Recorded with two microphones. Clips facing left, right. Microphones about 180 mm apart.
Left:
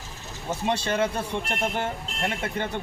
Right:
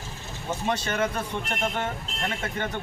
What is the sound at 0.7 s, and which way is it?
Speech, 30° left (ahead or behind).